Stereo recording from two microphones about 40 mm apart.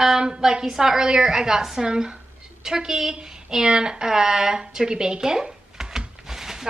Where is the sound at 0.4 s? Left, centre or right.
Centre.